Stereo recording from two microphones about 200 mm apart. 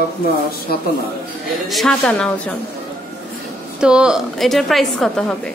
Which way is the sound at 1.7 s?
Centre (ahead or behind).